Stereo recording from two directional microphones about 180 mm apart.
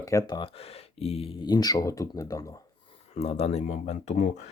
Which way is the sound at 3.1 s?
35° left (ahead or behind).